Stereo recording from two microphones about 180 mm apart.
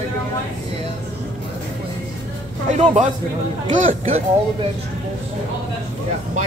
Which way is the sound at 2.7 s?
40° right (ahead or behind).